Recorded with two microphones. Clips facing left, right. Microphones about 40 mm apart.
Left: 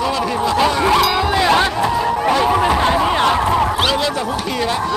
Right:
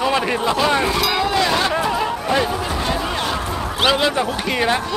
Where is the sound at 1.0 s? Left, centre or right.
Centre.